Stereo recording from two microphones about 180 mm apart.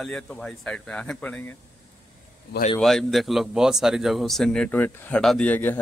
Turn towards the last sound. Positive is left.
turn(degrees=10)  # may be behind; listen again after turning